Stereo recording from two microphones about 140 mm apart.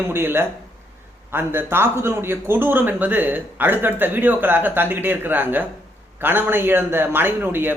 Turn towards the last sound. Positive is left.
turn(degrees=-15)  # may be behind; listen again after turning